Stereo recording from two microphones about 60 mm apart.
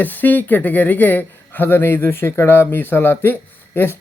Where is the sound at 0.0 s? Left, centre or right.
Left.